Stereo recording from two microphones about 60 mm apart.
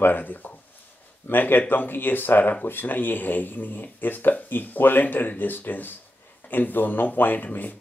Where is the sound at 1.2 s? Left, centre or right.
Left.